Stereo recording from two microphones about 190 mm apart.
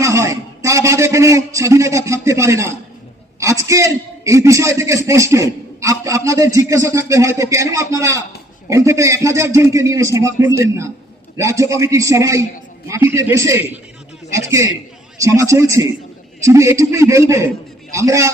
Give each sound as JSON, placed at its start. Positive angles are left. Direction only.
{"t": 0.0, "sound": "a man's voice", "side_deg": -15}